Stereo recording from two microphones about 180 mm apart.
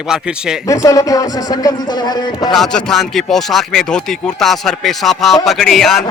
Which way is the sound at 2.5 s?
Centre (ahead or behind).